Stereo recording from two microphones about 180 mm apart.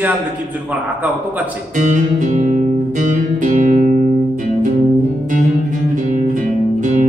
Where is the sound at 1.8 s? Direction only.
45° right (ahead or behind).